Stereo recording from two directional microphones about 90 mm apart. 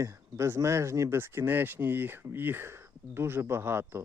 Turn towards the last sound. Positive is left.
turn(degrees=-30)  # may be behind; listen again after turning